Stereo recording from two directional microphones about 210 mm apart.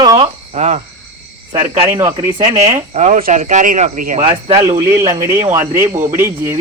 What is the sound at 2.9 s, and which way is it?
Speech, 35° right (ahead or behind).